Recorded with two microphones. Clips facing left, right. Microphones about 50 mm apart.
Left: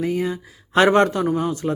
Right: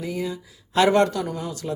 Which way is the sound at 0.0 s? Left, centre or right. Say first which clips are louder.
Left 6 dB; left.